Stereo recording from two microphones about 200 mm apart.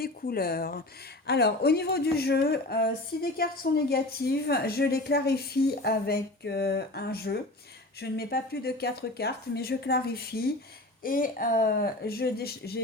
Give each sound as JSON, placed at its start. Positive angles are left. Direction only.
{"t": 0.0, "sound": "speech", "side_deg": 50}